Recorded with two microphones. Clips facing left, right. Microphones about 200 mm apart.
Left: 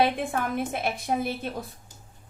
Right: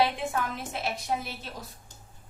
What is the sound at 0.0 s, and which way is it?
A woman's voice, 55° left (ahead or behind).